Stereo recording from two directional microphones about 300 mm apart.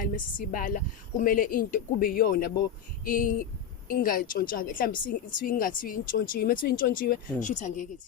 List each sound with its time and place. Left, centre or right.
0.0 s a woman's voice: left